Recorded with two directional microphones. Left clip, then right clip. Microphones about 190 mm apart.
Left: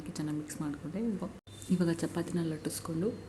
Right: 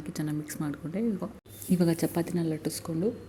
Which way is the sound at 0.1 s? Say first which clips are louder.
Right 3 dB; 25° right (ahead or behind).